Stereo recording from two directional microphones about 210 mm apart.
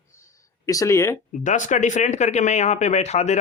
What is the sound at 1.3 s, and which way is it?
Speech, 35° left (ahead or behind).